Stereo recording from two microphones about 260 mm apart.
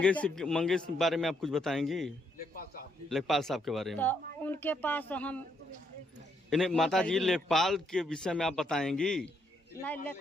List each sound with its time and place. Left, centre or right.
0.0 s a man's voice: centre
6.5 s a man's voice: centre